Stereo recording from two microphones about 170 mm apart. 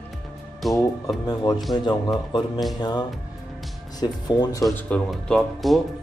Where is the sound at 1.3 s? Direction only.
25° left (ahead or behind).